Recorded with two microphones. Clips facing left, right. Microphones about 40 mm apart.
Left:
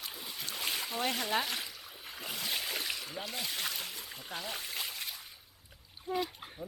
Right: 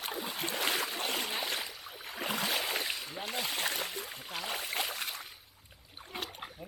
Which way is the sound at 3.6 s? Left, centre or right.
Right.